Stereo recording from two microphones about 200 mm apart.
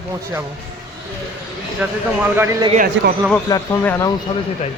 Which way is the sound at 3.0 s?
70° right (ahead or behind).